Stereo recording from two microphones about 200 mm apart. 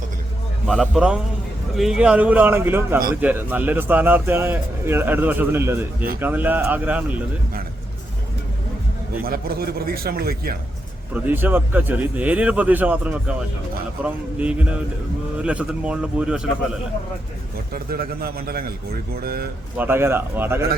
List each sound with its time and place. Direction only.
0.7 s a man's voice: centre (ahead or behind)
9.2 s a man's voice: 50° right (ahead or behind)
11.1 s a man's voice: 10° right (ahead or behind)
17.7 s a man's voice: 50° right (ahead or behind)
19.7 s speech: 10° right (ahead or behind)